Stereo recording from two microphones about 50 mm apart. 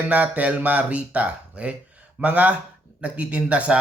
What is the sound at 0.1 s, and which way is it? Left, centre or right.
Speech, right.